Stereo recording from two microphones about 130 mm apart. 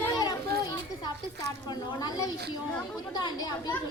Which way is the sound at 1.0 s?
30° left (ahead or behind).